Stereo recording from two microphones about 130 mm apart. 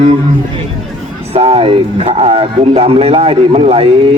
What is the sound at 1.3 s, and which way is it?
Speech, 50° right (ahead or behind).